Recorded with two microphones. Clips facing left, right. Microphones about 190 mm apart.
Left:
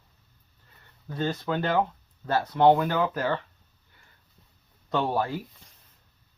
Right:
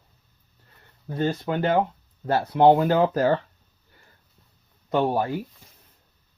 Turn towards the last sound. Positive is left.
turn(degrees=-15)  # may be behind; listen again after turning